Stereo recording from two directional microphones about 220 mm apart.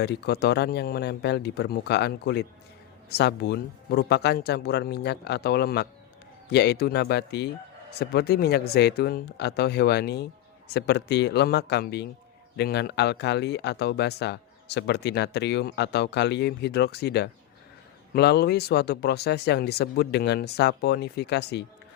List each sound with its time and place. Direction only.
0.0 s speech: 50° left (ahead or behind)